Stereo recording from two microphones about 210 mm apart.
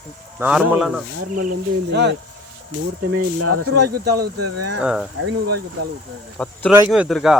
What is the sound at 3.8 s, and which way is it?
Speech, 50° right (ahead or behind).